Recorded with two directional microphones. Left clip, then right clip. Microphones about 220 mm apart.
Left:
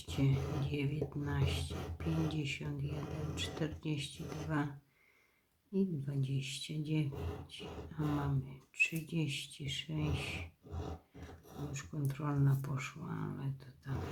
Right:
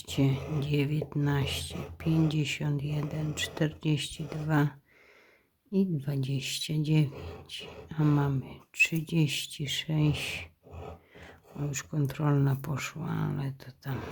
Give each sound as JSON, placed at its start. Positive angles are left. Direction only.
{"t": 0.1, "sound": "speech", "side_deg": -45}
{"t": 5.7, "sound": "speech", "side_deg": -45}
{"t": 11.7, "sound": "speech", "side_deg": -50}